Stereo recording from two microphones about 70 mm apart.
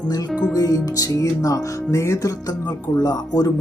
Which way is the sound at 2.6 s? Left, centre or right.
Left.